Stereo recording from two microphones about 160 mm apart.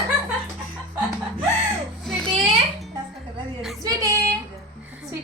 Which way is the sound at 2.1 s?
Centre (ahead or behind).